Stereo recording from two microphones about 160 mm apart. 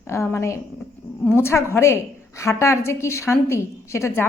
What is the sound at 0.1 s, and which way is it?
Speech, 15° left (ahead or behind).